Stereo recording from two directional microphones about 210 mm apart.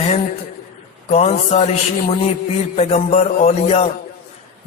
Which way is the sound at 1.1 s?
30° left (ahead or behind).